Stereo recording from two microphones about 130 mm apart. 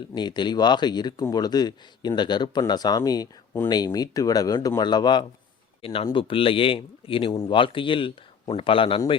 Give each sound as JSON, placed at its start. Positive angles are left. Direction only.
{"t": 0.1, "sound": "speech", "side_deg": 35}
{"t": 5.8, "sound": "speech", "side_deg": 45}